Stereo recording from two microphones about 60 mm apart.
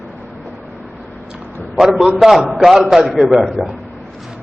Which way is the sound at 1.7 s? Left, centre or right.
Centre.